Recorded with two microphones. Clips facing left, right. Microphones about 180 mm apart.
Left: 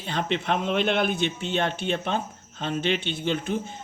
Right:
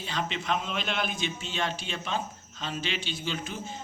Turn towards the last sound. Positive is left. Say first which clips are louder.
# left 8 dB
turn(degrees=55)  # may be behind; listen again after turning